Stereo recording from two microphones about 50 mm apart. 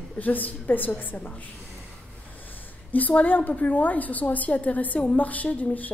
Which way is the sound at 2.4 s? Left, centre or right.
Left.